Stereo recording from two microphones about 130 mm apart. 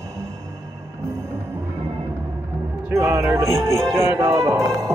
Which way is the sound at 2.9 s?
20° right (ahead or behind).